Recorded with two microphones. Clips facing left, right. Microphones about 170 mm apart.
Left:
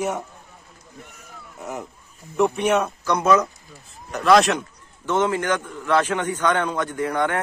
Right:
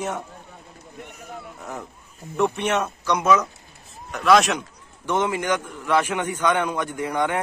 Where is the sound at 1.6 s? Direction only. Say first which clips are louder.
Left 3 dB; 5° left (ahead or behind).